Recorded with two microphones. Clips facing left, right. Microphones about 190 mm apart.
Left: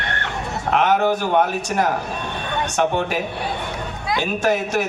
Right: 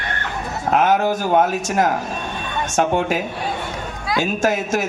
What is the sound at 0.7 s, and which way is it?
Speech, 40° right (ahead or behind).